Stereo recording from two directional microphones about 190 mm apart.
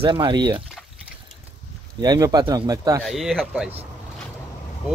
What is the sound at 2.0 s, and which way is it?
Speech, 20° right (ahead or behind).